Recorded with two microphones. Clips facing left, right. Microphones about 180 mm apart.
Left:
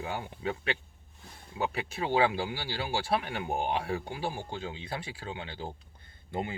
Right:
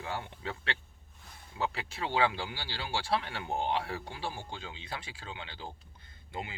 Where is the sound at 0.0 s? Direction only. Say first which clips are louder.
Left 4 dB; 20° left (ahead or behind).